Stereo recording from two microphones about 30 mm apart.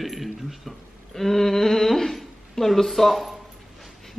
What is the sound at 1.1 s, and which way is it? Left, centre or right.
Speech, centre.